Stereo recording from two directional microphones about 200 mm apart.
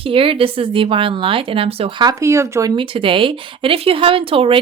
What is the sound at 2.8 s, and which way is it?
Speech, 25° right (ahead or behind).